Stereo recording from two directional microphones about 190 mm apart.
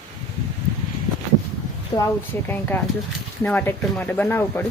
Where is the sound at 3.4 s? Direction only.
10° left (ahead or behind).